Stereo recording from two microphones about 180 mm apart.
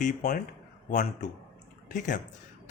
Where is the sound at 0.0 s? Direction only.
50° left (ahead or behind).